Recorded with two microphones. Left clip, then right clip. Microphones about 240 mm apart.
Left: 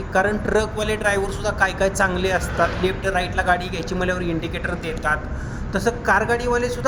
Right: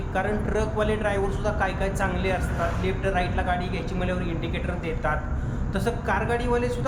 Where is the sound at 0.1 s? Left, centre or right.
Left.